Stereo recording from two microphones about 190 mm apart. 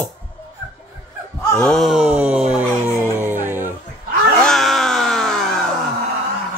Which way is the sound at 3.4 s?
10° right (ahead or behind).